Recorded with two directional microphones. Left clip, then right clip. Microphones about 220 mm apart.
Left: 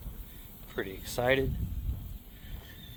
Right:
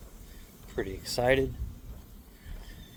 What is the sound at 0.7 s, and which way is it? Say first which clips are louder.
Speech: right 2 dB; 20° right (ahead or behind).